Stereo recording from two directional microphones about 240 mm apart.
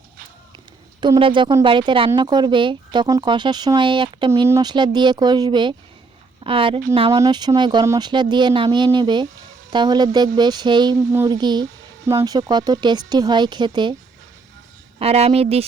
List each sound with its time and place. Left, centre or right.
1.0 s speech: centre
14.9 s speech: right